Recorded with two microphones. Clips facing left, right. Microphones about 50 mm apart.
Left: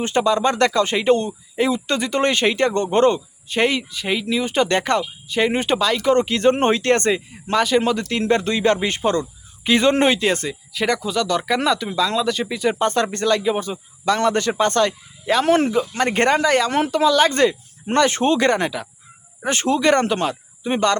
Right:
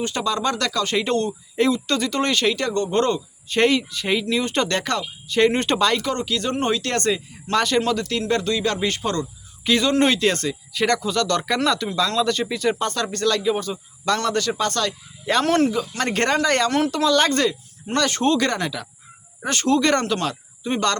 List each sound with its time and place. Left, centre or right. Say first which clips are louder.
0.0 s speech: left 5 dB; left
3.5 s speech: right 1 dB; centre
4.7 s speech: left 4 dB; left
5.3 s speech: right 1 dB; centre
6.0 s speech: left 7 dB; left
7.5 s speech: left 3 dB; centre
7.8 s speech: left 2 dB; centre
10.0 s speech: left 1 dB; centre
12.8 s speech: left 3 dB; left
15.3 s speech: left 3 dB; centre
15.5 s speech: left 2 dB; centre
17.3 s speech: left 4 dB; left